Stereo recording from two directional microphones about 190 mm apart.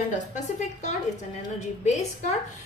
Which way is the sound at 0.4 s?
40° left (ahead or behind).